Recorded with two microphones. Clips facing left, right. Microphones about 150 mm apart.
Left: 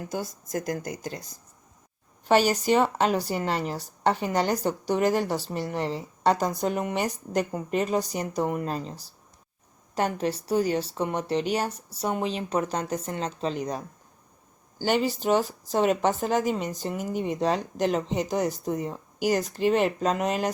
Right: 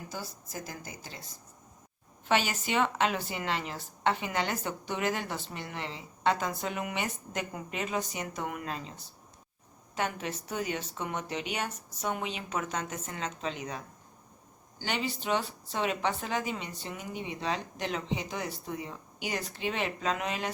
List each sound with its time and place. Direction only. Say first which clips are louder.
0.5 s speech: left 13 dB; 55° left (ahead or behind)
2.2 s speech: left 8 dB; 40° left (ahead or behind)